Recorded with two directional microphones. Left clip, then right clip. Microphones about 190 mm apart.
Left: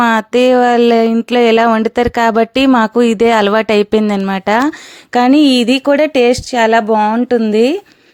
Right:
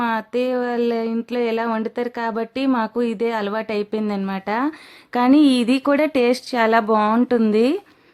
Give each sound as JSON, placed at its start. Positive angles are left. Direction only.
{"t": 0.0, "sound": "speech", "side_deg": 40}
{"t": 5.1, "sound": "speech", "side_deg": 25}